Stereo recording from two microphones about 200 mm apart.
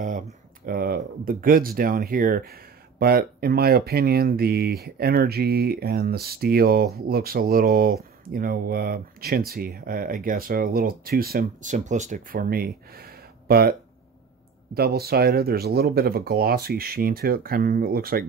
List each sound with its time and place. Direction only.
0.7 s speech: 50° right (ahead or behind)
15.0 s speech: 50° right (ahead or behind)